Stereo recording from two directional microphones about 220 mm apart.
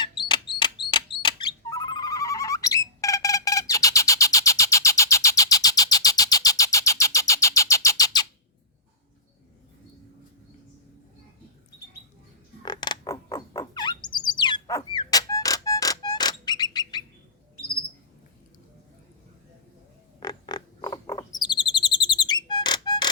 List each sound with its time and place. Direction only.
0.0 s bird: 20° left (ahead or behind)
12.6 s bird: 20° left (ahead or behind)
20.1 s bird: 20° left (ahead or behind)